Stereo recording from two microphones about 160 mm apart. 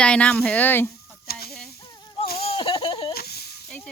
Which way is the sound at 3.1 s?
80° left.